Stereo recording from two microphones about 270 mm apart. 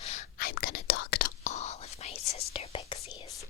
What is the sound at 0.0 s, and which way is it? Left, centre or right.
Whispering, left.